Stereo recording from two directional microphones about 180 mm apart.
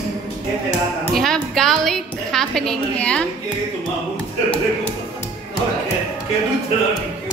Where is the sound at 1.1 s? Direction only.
Centre (ahead or behind).